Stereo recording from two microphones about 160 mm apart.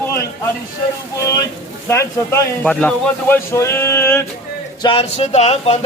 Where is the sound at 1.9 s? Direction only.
20° left (ahead or behind).